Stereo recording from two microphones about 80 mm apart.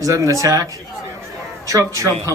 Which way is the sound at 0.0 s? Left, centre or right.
Right.